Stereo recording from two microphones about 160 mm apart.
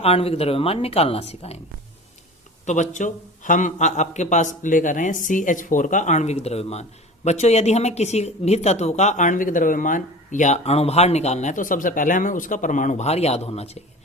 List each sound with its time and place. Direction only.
0.0 s speech: 40° left (ahead or behind)
2.6 s speech: 50° left (ahead or behind)